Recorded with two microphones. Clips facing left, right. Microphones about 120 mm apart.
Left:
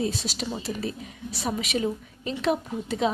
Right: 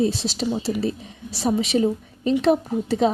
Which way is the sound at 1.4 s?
30° right (ahead or behind).